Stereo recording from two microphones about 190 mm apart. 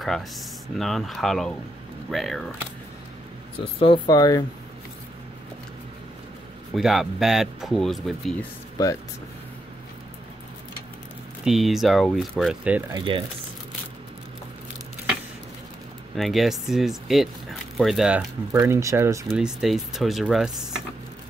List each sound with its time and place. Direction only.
0.0 s speech: centre (ahead or behind)
3.8 s speech: 25° left (ahead or behind)
6.7 s speech: centre (ahead or behind)
11.4 s speech: centre (ahead or behind)
12.9 s speech: 25° right (ahead or behind)
16.2 s speech: centre (ahead or behind)
18.5 s speech: 15° right (ahead or behind)
19.2 s speech: 5° right (ahead or behind)